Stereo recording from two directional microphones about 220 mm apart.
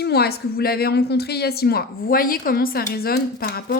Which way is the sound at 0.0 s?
45° left (ahead or behind).